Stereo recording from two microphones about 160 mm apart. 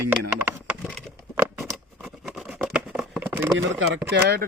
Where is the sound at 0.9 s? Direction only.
5° left (ahead or behind).